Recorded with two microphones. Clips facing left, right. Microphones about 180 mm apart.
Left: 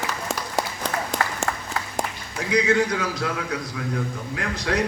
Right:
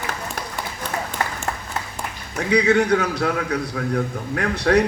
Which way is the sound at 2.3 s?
65° right (ahead or behind).